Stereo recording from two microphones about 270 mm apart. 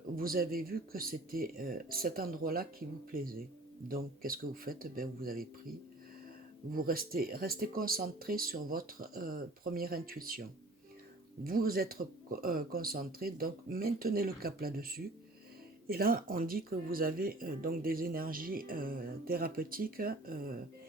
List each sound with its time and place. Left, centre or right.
0.2 s speech: right
6.7 s speech: right
11.4 s speech: right